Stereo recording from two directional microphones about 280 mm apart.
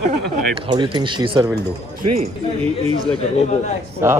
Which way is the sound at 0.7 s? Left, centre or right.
Centre.